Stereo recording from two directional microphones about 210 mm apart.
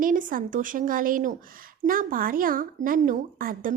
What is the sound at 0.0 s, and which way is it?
Speech, 40° right (ahead or behind).